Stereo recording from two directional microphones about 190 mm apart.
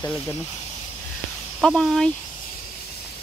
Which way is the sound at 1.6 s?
5° left (ahead or behind).